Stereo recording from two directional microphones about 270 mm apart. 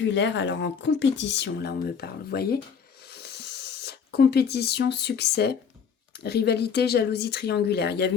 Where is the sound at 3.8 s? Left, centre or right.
Left.